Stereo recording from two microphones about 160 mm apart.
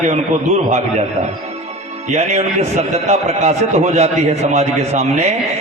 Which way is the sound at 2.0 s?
45° right (ahead or behind).